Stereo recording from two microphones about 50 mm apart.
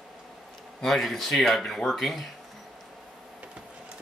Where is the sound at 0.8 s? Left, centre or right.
Centre.